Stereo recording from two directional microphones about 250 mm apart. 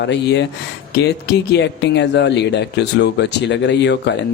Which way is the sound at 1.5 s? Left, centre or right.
Left.